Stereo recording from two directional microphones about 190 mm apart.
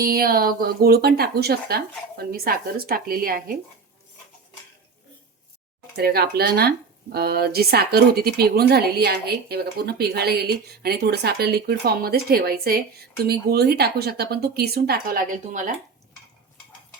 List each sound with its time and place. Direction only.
0.0 s speech: 50° right (ahead or behind)
6.0 s speech: 55° right (ahead or behind)